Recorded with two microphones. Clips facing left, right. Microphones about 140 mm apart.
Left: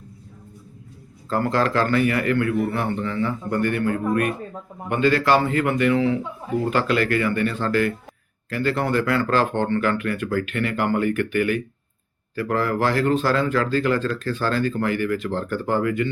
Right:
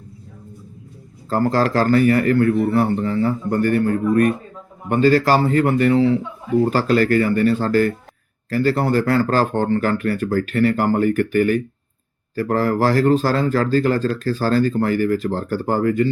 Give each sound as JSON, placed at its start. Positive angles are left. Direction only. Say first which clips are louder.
{"t": 1.3, "sound": "speech", "louder": "right 3 dB", "side_deg": -40}